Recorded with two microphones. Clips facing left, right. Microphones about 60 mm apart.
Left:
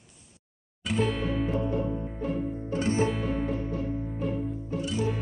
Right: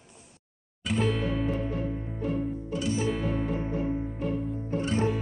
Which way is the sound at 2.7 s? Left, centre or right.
Left.